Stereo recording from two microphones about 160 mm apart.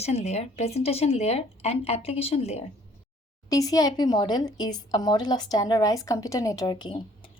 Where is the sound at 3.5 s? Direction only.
20° left (ahead or behind).